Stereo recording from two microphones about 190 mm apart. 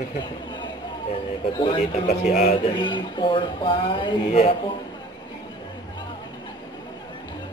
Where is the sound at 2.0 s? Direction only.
35° left (ahead or behind).